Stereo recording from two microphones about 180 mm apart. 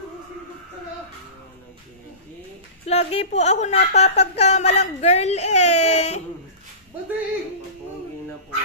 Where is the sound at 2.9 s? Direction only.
35° left (ahead or behind).